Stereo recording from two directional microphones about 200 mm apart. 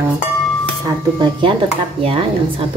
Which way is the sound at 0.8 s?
25° right (ahead or behind).